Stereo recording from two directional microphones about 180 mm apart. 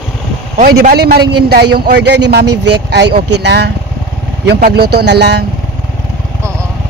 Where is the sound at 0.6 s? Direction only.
50° right (ahead or behind); by 5.4 s 70° right (ahead or behind).